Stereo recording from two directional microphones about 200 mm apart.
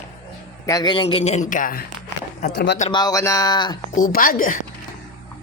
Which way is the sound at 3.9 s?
45° left (ahead or behind).